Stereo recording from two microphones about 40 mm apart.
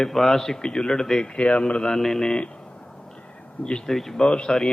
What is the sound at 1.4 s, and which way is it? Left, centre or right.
Speech, left.